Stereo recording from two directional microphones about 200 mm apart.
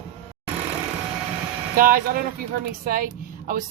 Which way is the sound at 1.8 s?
45° right (ahead or behind).